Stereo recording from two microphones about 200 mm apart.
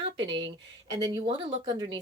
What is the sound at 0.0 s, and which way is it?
Speech, 25° right (ahead or behind).